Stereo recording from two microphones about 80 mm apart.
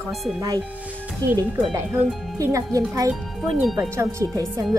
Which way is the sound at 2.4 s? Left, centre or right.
Right.